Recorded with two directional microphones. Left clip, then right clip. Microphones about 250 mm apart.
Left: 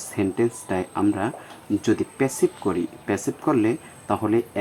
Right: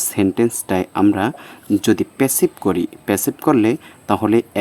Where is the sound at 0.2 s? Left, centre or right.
Right.